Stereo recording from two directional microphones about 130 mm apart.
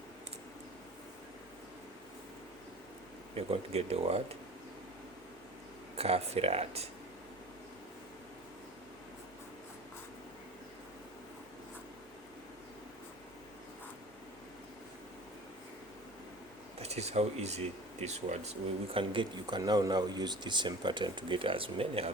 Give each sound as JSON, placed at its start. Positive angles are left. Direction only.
{"t": 3.3, "sound": "speech", "side_deg": -50}
{"t": 6.0, "sound": "speech", "side_deg": -50}
{"t": 16.7, "sound": "speech", "side_deg": -55}